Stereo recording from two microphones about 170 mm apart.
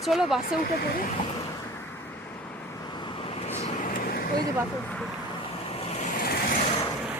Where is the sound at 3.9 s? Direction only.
60° left (ahead or behind).